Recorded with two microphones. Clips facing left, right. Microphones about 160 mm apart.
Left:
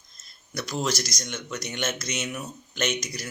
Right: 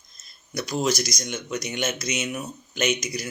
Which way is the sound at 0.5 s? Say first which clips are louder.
Right 4 dB; 15° right (ahead or behind).